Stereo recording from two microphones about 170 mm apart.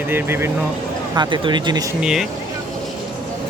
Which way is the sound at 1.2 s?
25° right (ahead or behind).